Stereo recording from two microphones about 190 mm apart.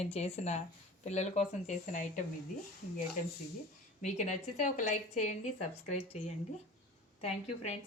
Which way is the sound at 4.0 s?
40° left (ahead or behind).